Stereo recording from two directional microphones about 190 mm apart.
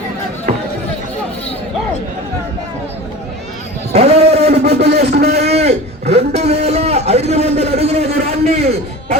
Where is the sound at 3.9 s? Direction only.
35° right (ahead or behind).